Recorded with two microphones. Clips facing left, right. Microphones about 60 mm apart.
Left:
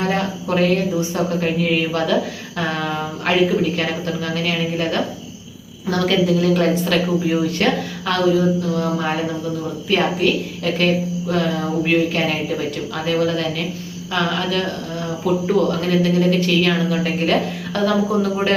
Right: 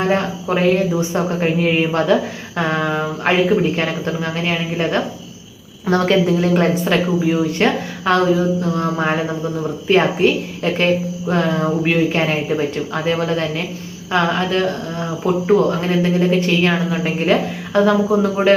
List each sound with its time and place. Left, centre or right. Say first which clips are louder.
0.0 s speech: right 3 dB; right
0.4 s speech: right 1 dB; centre
0.9 s a woman's voice: right 1 dB; right